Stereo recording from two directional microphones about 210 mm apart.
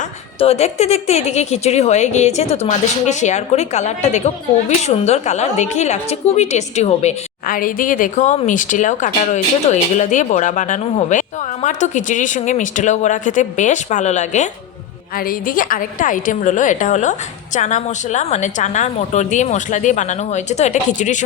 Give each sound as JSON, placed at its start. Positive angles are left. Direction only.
{"t": 0.3, "sound": "a woman's voice", "side_deg": 30}